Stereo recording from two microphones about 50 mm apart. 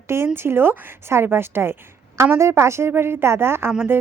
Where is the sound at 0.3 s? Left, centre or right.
Right.